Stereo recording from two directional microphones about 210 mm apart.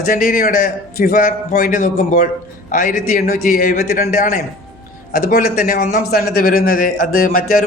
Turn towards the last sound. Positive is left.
turn(degrees=40)  # may be behind; listen again after turning